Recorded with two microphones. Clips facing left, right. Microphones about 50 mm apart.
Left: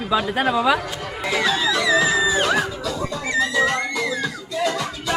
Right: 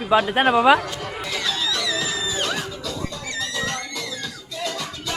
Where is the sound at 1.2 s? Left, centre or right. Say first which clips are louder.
Left 7 dB; centre.